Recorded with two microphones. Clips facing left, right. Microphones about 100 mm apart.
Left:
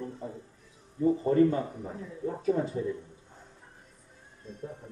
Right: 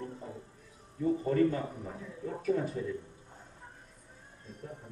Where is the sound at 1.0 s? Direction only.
25° left (ahead or behind).